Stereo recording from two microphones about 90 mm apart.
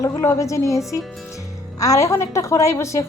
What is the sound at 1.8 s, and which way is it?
A woman's voice, 35° left (ahead or behind).